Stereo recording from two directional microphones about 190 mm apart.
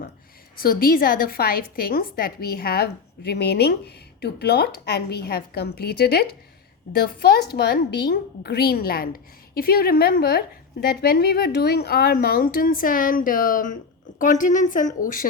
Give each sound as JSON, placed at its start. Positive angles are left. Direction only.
{"t": 0.5, "sound": "a woman's voice", "side_deg": 50}